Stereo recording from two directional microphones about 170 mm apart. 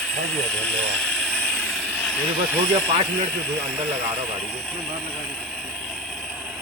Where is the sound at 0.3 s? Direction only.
5° left (ahead or behind).